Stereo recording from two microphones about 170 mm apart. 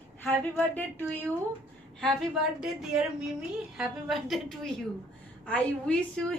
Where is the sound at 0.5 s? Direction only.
10° left (ahead or behind).